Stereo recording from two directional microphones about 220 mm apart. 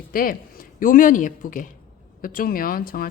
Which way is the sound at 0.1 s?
40° left (ahead or behind).